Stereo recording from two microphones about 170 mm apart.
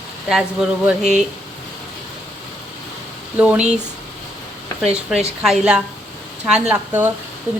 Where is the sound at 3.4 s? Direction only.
5° right (ahead or behind).